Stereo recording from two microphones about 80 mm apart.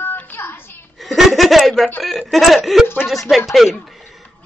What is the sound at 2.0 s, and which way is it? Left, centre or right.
Speech, centre.